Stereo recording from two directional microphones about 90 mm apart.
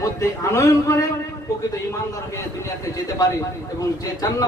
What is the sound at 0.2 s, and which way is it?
Speech, 35° left (ahead or behind).